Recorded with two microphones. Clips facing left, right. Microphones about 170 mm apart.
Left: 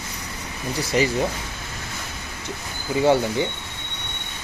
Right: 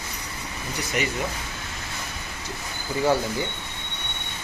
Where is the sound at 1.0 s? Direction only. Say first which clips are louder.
Left 7 dB; 30° left (ahead or behind).